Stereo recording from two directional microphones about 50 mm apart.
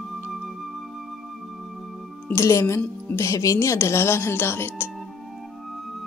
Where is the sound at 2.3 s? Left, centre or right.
Left.